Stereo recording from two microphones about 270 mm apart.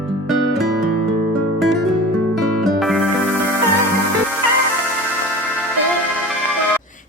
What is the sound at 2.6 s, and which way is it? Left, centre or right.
Music, centre.